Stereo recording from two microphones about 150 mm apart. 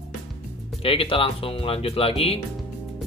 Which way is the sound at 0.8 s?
35° left (ahead or behind).